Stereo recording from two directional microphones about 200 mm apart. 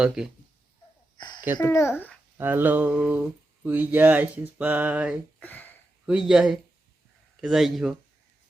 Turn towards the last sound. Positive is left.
turn(degrees=0)  # may be behind; listen again after turning